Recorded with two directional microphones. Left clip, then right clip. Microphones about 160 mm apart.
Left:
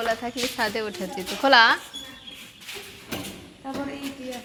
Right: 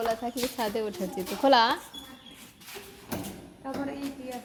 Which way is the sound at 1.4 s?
30° right (ahead or behind).